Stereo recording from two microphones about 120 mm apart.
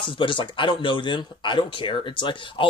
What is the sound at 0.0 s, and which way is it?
Speech, 45° left (ahead or behind).